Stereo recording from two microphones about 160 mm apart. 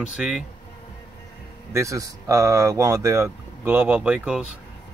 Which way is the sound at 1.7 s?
20° right (ahead or behind).